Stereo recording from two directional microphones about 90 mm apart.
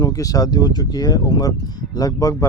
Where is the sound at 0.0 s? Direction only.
45° left (ahead or behind).